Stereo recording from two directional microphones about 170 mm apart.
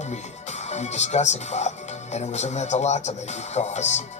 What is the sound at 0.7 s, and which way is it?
Speech, 40° left (ahead or behind).